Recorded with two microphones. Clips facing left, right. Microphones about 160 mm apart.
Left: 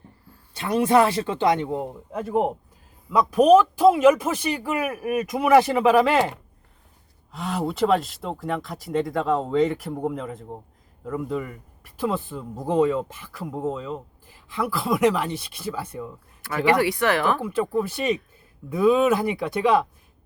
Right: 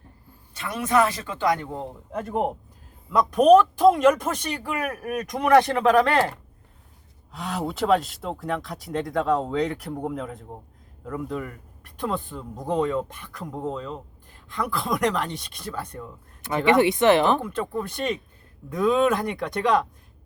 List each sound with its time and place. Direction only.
0.5 s speech: 30° left (ahead or behind)
2.1 s speech: 5° left (ahead or behind)
16.4 s speech: 20° right (ahead or behind)
17.4 s speech: 5° left (ahead or behind)